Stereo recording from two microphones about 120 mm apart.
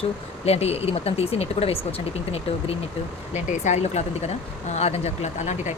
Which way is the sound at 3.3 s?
65° left (ahead or behind).